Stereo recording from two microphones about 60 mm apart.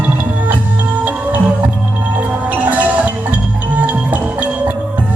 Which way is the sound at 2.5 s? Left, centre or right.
Right.